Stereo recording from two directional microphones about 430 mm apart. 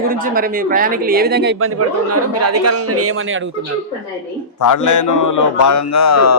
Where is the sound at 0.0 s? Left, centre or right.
Centre.